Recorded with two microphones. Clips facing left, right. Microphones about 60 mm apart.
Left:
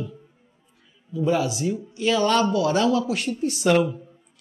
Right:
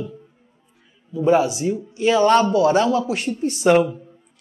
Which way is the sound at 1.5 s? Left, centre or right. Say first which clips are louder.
Right 3 dB; centre.